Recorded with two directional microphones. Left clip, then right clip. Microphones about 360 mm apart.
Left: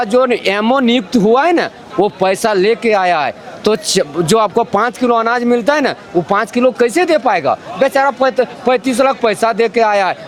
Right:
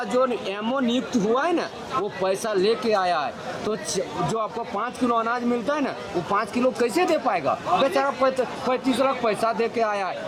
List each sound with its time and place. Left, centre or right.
0.0 s speech: left